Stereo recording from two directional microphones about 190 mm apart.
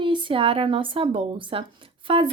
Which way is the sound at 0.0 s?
25° right (ahead or behind).